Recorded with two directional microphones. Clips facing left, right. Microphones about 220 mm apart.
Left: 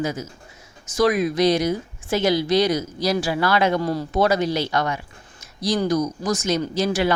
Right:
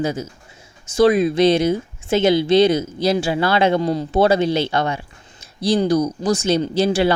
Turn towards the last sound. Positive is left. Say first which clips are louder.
# right 4 dB
turn(degrees=-30)  # may be behind; listen again after turning